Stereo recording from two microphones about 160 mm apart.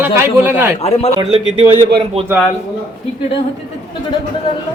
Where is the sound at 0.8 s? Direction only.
40° left (ahead or behind).